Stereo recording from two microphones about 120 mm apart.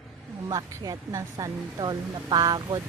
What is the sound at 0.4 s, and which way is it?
Speech, 30° right (ahead or behind).